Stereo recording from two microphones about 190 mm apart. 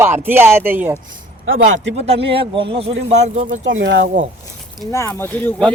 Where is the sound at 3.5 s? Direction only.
75° right (ahead or behind).